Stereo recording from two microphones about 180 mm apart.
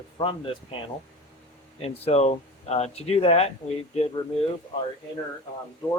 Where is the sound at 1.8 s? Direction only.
35° left (ahead or behind).